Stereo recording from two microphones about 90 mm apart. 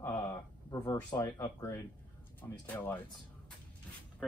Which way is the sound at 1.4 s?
35° left (ahead or behind).